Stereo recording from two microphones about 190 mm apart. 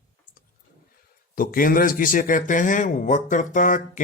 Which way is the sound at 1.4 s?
50° left (ahead or behind).